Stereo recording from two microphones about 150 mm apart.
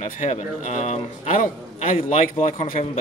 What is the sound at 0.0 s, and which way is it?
A man's voice, 50° left (ahead or behind).